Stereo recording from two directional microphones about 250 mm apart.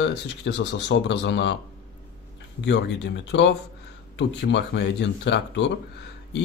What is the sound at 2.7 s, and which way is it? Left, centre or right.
Speech, left.